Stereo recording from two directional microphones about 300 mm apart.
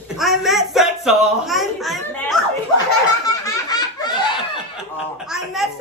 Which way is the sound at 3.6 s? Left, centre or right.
Centre.